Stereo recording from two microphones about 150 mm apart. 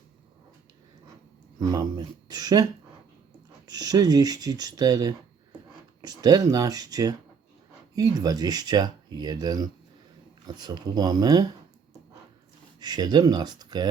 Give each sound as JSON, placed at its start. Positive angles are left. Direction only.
{"t": 1.5, "sound": "speech", "side_deg": -25}
{"t": 3.7, "sound": "speech", "side_deg": -25}
{"t": 12.8, "sound": "speech", "side_deg": -25}